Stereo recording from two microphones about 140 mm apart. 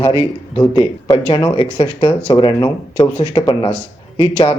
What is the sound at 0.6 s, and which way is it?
Speech, 20° left (ahead or behind).